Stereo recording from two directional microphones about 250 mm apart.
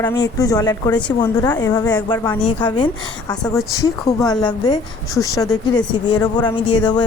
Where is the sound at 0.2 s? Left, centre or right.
Centre.